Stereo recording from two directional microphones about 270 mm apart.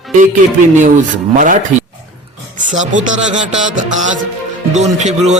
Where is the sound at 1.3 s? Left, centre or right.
Right.